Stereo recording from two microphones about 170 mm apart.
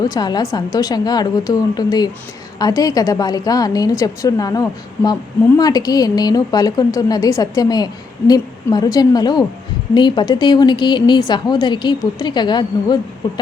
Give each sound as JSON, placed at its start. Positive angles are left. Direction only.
{"t": 0.0, "sound": "a woman's voice", "side_deg": 25}